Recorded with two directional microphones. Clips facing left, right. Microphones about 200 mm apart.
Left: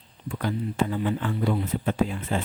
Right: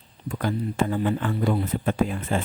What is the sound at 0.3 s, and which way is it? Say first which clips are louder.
Speech: right 2 dB; 50° right (ahead or behind).